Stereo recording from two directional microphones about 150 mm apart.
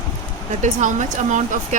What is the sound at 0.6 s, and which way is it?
Speech, 55° right (ahead or behind).